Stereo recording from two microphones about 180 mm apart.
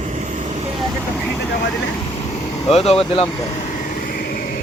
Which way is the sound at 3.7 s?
50° left (ahead or behind).